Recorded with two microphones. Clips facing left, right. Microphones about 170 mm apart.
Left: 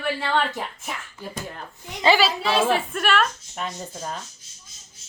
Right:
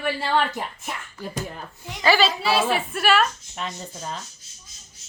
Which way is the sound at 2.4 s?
5° right (ahead or behind).